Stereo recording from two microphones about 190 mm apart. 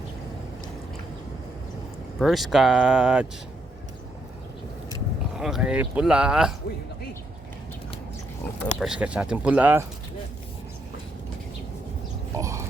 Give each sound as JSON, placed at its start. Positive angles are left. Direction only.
{"t": 2.1, "sound": "speech", "side_deg": 0}
{"t": 5.4, "sound": "speech", "side_deg": -5}
{"t": 8.6, "sound": "speech", "side_deg": 0}
{"t": 12.4, "sound": "a sound", "side_deg": -15}